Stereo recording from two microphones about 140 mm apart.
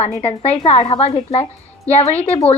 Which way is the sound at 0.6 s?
35° left (ahead or behind).